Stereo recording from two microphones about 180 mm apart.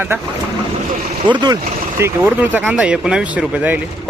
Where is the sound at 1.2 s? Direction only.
25° right (ahead or behind).